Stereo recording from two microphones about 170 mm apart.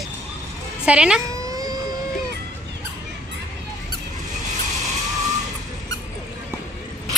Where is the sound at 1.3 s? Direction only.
20° right (ahead or behind).